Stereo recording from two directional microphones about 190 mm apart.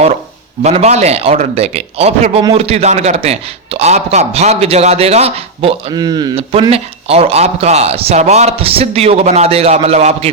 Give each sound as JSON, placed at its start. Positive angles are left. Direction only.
{"t": 0.6, "sound": "a man's voice", "side_deg": -35}